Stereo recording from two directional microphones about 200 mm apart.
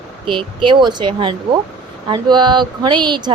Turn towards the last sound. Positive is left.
turn(degrees=-20)  # may be behind; listen again after turning